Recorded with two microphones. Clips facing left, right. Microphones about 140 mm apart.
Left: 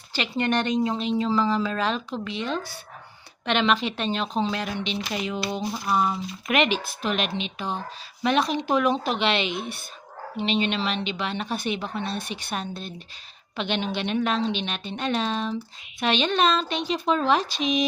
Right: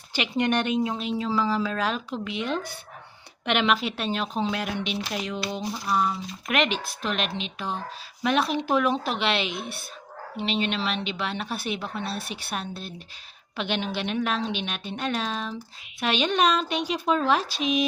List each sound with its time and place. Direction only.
0.1 s a woman's voice: 15° right (ahead or behind)